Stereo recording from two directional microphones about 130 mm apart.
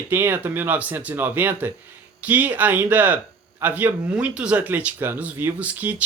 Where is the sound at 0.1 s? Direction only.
15° right (ahead or behind).